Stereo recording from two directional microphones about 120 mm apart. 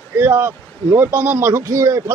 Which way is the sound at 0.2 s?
20° right (ahead or behind).